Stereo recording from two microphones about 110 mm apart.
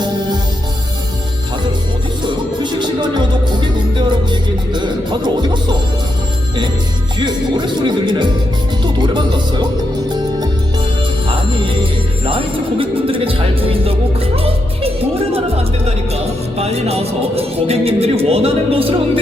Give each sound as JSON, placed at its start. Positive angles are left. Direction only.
{"t": 2.2, "sound": "music", "side_deg": -45}
{"t": 7.2, "sound": "speech", "side_deg": -45}
{"t": 11.3, "sound": "music", "side_deg": -50}